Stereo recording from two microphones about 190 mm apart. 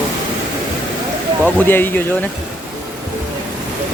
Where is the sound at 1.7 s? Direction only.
10° left (ahead or behind).